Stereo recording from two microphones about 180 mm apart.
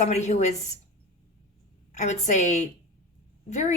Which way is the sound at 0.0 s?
40° left (ahead or behind).